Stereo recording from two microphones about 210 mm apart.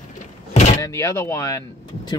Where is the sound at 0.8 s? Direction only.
15° left (ahead or behind).